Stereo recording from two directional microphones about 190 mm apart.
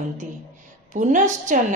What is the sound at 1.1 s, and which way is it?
Speech, 40° right (ahead or behind).